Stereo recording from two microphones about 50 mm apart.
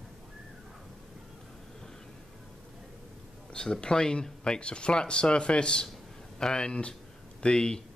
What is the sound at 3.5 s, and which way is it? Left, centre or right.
Speech, centre.